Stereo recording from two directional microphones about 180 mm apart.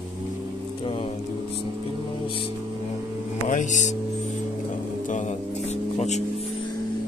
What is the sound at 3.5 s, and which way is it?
Music, 40° left (ahead or behind).